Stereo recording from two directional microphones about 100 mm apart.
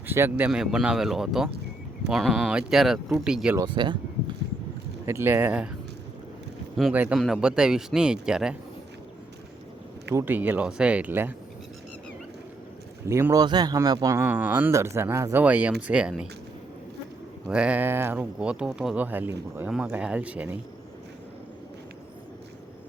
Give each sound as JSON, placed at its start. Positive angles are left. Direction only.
{"t": 0.1, "sound": "speech", "side_deg": -20}
{"t": 0.5, "sound": "speech", "side_deg": -5}
{"t": 3.8, "sound": "a sound", "side_deg": -50}
{"t": 5.0, "sound": "speech", "side_deg": -25}
{"t": 6.9, "sound": "speech", "side_deg": -15}
{"t": 7.2, "sound": "speech", "side_deg": -5}
{"t": 10.2, "sound": "speech", "side_deg": -20}
{"t": 13.1, "sound": "speech", "side_deg": -25}
{"t": 13.4, "sound": "speech", "side_deg": -45}
{"t": 14.2, "sound": "speech", "side_deg": -20}
{"t": 14.7, "sound": "speech", "side_deg": -30}
{"t": 17.5, "sound": "speech", "side_deg": -10}
{"t": 18.9, "sound": "speech", "side_deg": -20}